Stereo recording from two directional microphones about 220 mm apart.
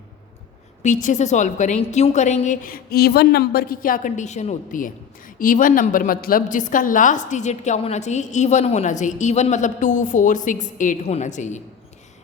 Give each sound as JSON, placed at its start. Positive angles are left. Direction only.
{"t": 0.8, "sound": "a woman's voice", "side_deg": 35}